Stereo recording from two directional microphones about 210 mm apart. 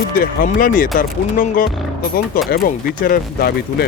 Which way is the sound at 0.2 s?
40° left (ahead or behind).